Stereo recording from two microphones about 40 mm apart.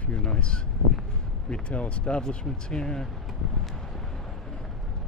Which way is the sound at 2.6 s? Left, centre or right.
Centre.